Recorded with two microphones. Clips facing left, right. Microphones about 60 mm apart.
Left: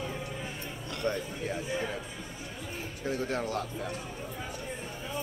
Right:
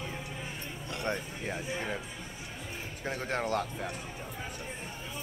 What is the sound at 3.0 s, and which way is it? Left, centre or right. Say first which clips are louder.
Speech: left 1 dB; right.